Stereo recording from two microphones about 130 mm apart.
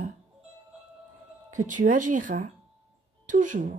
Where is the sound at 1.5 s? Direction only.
75° right (ahead or behind).